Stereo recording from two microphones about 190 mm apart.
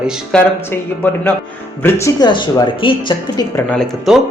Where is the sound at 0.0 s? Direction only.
5° left (ahead or behind); by 3.6 s 20° left (ahead or behind).